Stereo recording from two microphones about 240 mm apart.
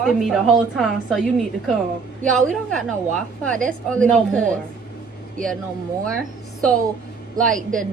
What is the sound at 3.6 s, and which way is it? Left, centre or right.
Speech, centre.